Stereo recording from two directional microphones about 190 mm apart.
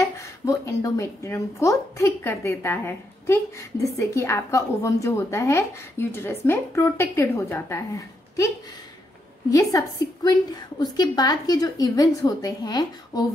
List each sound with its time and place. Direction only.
0.2 s a woman's voice: 15° left (ahead or behind)
9.5 s a woman's voice: 20° left (ahead or behind)